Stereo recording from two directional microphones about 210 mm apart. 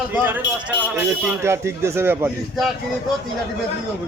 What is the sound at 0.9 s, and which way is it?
A man's voice, 10° right (ahead or behind).